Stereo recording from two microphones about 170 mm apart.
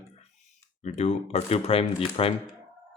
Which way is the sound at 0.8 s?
40° left (ahead or behind).